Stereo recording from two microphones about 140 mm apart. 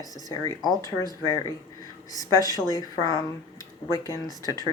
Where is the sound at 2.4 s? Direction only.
25° left (ahead or behind).